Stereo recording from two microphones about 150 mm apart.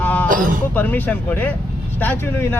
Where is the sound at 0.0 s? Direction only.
10° left (ahead or behind).